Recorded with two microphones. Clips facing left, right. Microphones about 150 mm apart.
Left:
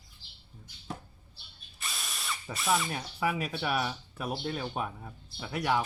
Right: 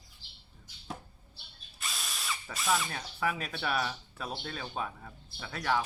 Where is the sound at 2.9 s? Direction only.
10° left (ahead or behind).